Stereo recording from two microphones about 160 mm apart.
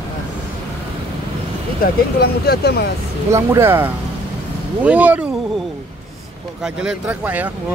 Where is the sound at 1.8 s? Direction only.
75° left (ahead or behind).